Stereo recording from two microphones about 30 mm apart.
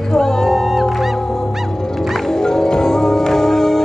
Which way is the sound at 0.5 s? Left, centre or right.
Centre.